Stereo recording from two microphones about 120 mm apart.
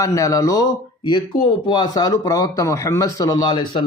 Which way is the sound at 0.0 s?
25° left (ahead or behind).